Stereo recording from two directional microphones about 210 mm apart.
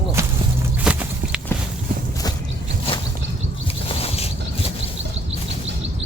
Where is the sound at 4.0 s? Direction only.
30° left (ahead or behind).